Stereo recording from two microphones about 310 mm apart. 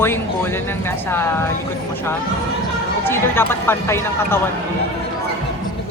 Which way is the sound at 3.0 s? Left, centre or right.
Centre.